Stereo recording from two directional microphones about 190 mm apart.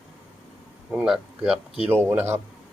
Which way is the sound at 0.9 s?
5° right (ahead or behind).